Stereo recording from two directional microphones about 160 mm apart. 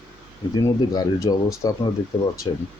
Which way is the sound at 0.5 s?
20° left (ahead or behind).